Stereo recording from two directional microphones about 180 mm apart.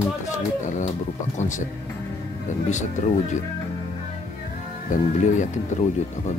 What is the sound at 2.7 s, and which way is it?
Speech, 40° left (ahead or behind).